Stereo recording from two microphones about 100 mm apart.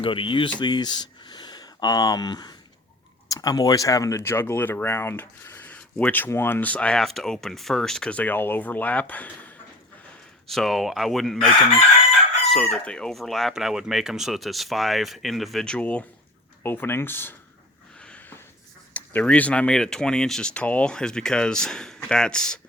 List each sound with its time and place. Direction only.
0.0 s speech: 60° left (ahead or behind); by 9.5 s 15° left (ahead or behind)
10.4 s speech: centre (ahead or behind)
16.6 s speech: 25° left (ahead or behind)
18.0 s a sound: 10° left (ahead or behind)
18.9 s speech: 15° left (ahead or behind)